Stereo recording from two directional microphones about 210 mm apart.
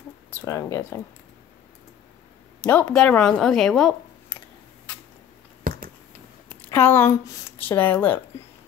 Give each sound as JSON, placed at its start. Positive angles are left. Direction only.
{"t": 0.3, "sound": "speech", "side_deg": 15}
{"t": 2.6, "sound": "speech", "side_deg": 5}
{"t": 5.6, "sound": "a sound", "side_deg": -40}
{"t": 6.5, "sound": "speech", "side_deg": 10}